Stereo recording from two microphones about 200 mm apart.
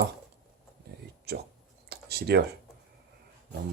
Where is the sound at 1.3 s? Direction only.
55° right (ahead or behind).